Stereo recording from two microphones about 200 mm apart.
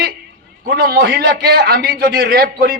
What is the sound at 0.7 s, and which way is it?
A man's voice, 55° right (ahead or behind).